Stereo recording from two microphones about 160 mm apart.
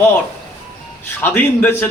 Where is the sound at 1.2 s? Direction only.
10° left (ahead or behind).